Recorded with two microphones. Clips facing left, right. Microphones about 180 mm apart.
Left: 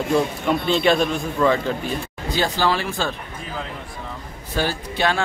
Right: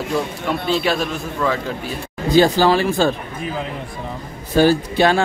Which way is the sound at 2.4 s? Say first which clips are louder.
Right 8 dB; 40° right (ahead or behind).